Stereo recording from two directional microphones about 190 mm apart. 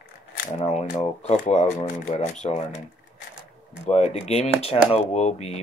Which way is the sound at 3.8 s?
35° left (ahead or behind).